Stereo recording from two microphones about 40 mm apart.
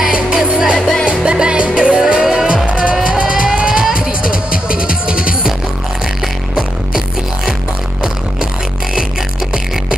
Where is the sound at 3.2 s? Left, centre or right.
Centre.